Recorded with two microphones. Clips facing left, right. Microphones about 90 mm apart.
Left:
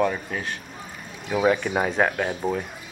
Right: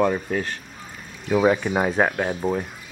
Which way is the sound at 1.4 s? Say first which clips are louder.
Right 1 dB; 10° right (ahead or behind).